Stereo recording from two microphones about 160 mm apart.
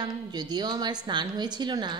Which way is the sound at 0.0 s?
25° right (ahead or behind).